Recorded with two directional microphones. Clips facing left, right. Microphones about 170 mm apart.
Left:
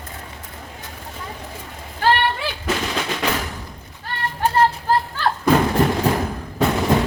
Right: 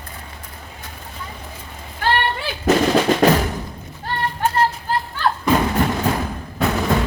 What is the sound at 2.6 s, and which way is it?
Drum, 45° right (ahead or behind).